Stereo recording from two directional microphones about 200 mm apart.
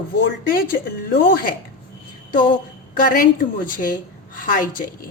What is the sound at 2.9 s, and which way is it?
Speech, 45° left (ahead or behind).